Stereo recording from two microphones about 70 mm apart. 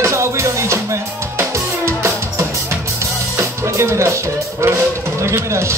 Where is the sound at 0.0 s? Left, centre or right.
Right.